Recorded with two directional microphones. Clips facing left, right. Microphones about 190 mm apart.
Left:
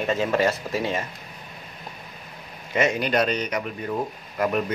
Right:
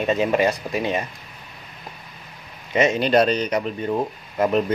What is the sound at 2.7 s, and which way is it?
Speech, 20° right (ahead or behind).